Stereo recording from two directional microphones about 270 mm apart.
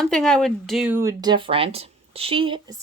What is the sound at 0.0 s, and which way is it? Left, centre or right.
Speech, centre.